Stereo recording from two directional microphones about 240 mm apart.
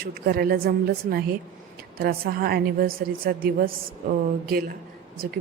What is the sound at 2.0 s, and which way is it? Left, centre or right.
A woman's voice, right.